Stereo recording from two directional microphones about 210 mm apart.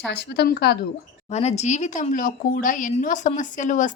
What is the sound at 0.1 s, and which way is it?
Speech, 50° left (ahead or behind).